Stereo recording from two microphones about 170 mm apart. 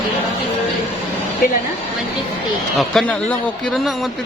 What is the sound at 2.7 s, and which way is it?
Speech, centre (ahead or behind).